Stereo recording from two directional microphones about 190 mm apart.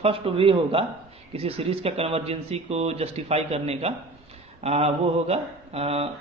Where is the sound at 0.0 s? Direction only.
30° right (ahead or behind).